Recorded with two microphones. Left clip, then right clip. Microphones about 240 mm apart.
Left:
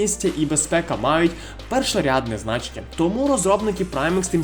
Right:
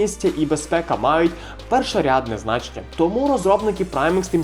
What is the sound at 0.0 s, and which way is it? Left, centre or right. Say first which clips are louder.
Speech: right 2 dB; left.